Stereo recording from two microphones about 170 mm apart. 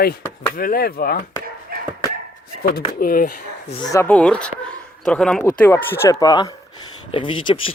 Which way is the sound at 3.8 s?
20° left (ahead or behind).